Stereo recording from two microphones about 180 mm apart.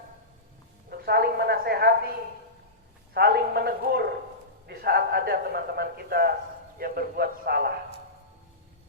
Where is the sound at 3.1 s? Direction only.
60° right (ahead or behind).